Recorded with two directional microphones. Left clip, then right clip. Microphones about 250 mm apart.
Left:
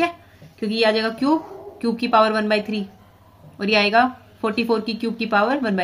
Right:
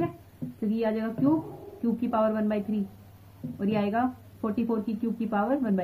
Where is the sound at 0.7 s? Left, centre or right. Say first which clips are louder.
Left 11 dB; left.